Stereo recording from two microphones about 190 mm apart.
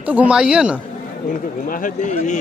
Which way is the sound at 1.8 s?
40° left (ahead or behind).